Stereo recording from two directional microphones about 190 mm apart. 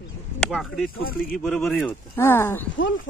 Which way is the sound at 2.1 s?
15° left (ahead or behind).